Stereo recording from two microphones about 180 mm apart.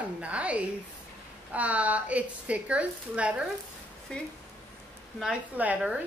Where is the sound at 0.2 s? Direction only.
5° right (ahead or behind).